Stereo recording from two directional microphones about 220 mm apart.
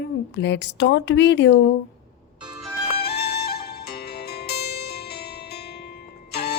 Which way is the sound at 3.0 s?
45° left (ahead or behind).